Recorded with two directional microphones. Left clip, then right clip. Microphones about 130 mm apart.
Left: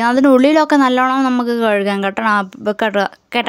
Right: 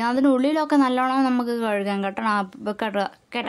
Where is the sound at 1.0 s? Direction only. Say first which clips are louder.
Left 7 dB; 30° left (ahead or behind).